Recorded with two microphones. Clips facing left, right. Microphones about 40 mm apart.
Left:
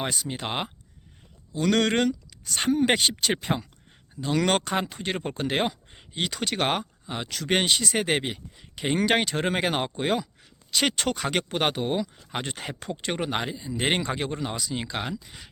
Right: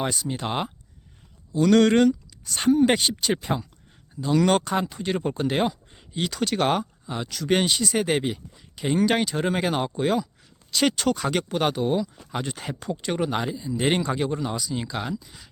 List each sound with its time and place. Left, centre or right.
0.0 s speech: left
0.3 s speech: centre
1.5 s speech: left
13.7 s speech: left